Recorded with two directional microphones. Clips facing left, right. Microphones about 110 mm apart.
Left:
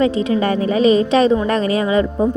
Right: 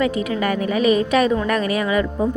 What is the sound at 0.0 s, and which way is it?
A woman's voice, 30° left (ahead or behind).